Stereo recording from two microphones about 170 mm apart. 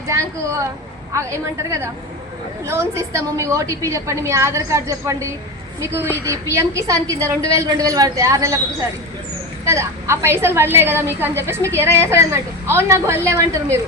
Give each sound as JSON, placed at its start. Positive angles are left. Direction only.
{"t": 0.1, "sound": "a woman's voice", "side_deg": -20}
{"t": 9.6, "sound": "a woman's voice", "side_deg": -15}